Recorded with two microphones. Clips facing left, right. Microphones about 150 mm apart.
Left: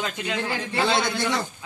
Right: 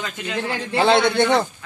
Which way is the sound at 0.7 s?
75° right (ahead or behind).